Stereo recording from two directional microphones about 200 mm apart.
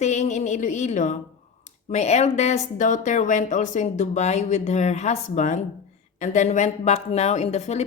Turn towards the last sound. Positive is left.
turn(degrees=35)  # may be behind; listen again after turning